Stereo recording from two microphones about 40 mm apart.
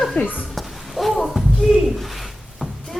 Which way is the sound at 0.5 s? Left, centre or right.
Centre.